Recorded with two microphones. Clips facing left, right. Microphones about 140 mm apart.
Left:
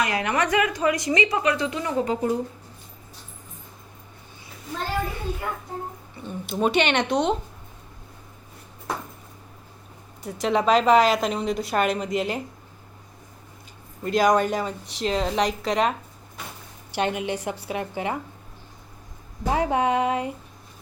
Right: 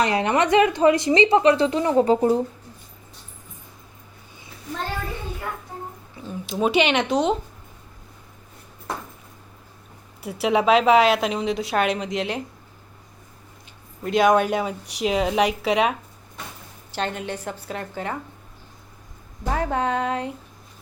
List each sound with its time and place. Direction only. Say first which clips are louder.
0.0 s a woman's voice: right 4 dB; 30° right (ahead or behind)
6.1 s speech: right 1 dB; centre (ahead or behind)
10.2 s a woman's voice: right 2 dB; 10° right (ahead or behind)
14.0 s a woman's voice: right 2 dB; centre (ahead or behind)
16.9 s a woman's voice: left 2 dB; 10° left (ahead or behind)
19.5 s a woman's voice: left 2 dB; 10° left (ahead or behind)